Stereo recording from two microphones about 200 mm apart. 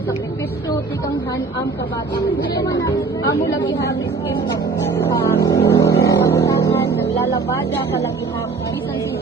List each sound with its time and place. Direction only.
2.7 s speech: 15° left (ahead or behind)
3.3 s a woman's voice: 55° left (ahead or behind)
3.6 s a woman's voice: 20° left (ahead or behind)
5.3 s speech: 15° left (ahead or behind)
5.6 s a sound: 15° left (ahead or behind)